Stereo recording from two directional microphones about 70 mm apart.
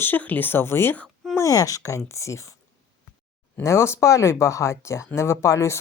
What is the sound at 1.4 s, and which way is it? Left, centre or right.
Speech, left.